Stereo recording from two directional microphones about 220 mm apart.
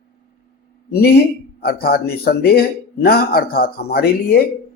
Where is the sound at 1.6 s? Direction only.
45° left (ahead or behind).